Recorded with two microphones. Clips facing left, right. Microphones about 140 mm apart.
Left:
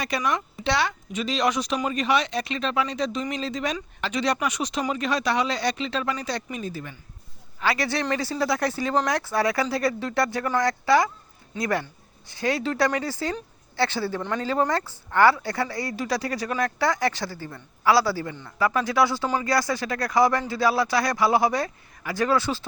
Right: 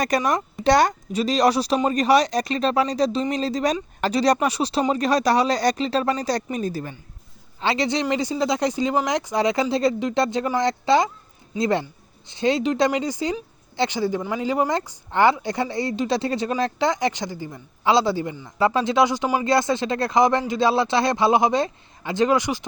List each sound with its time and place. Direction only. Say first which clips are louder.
0.2 s speech: right 4 dB; 40° right (ahead or behind)
7.6 s speech: right 3 dB; 25° right (ahead or behind)